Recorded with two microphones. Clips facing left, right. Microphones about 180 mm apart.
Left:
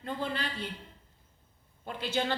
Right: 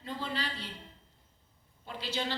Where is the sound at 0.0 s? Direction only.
55° left (ahead or behind).